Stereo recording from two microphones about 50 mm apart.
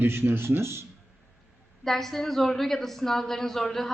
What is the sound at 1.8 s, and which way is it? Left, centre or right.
A woman's voice, centre.